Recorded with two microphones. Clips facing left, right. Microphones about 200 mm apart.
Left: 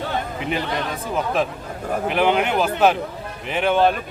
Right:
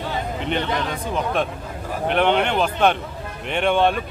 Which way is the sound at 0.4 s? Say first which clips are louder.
Right 2 dB; 5° left (ahead or behind).